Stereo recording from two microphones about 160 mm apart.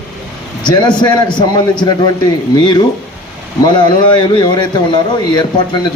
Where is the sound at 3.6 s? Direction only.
30° left (ahead or behind).